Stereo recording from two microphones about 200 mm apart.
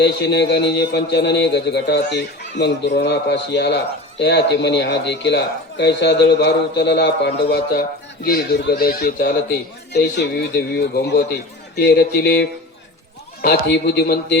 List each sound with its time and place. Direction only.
0.0 s a man's voice: 60° left (ahead or behind)